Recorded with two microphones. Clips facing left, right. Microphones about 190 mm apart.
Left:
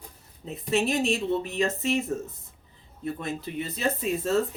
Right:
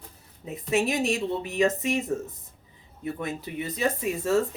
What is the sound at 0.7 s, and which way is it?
A woman's voice, 15° right (ahead or behind).